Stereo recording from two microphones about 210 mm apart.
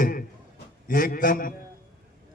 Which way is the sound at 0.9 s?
40° left (ahead or behind).